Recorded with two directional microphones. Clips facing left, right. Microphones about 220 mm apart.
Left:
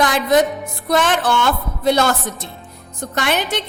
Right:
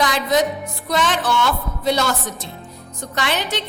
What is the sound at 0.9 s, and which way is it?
A woman's voice, 55° left (ahead or behind).